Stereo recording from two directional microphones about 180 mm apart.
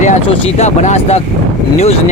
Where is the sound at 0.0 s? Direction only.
40° left (ahead or behind).